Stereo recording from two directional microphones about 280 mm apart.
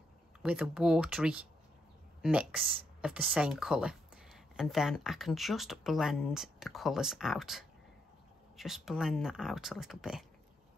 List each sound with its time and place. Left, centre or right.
0.4 s speech: centre